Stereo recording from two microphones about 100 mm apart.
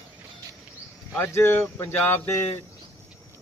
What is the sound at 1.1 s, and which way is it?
Speech, 25° left (ahead or behind).